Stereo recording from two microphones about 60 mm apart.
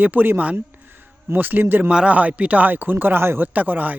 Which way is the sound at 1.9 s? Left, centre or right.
Centre.